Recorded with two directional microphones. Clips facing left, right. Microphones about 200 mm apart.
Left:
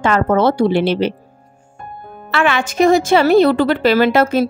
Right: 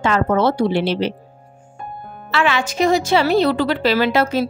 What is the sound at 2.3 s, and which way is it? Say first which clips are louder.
A woman's voice: left 2 dB; 55° left (ahead or behind).